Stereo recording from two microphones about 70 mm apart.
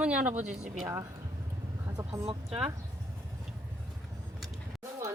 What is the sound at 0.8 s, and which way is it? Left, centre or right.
Speech, right.